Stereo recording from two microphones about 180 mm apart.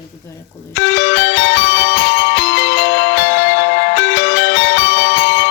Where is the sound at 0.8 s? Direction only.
75° left (ahead or behind).